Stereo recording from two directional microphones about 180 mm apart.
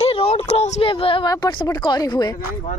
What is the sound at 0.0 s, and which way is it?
A woman's voice, 35° left (ahead or behind).